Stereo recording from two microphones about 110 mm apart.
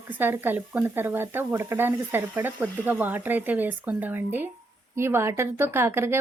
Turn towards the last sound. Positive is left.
turn(degrees=-25)  # may be behind; listen again after turning